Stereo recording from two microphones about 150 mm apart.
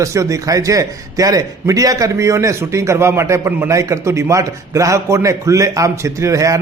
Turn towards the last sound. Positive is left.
turn(degrees=-20)  # may be behind; listen again after turning